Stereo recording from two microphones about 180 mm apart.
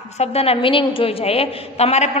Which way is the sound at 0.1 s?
35° left (ahead or behind).